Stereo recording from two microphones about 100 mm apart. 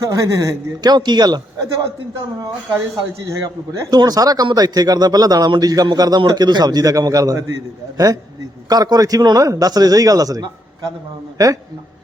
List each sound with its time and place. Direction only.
0.0 s a man's voice: 35° right (ahead or behind)
2.9 s a man's voice: 30° right (ahead or behind)